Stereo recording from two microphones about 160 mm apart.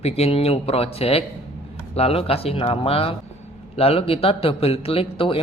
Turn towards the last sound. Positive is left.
turn(degrees=35)  # may be behind; listen again after turning